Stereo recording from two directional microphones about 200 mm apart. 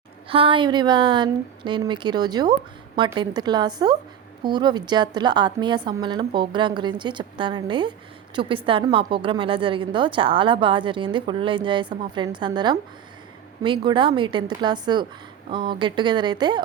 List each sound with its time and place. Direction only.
0.3 s a woman's voice: 25° right (ahead or behind)